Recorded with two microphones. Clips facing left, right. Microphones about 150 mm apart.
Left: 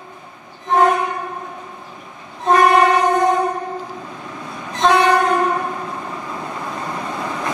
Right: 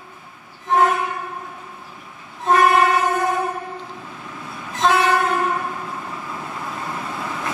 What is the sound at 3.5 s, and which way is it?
Train, 35° left (ahead or behind).